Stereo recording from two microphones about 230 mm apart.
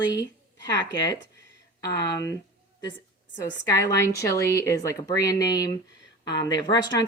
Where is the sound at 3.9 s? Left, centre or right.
Centre.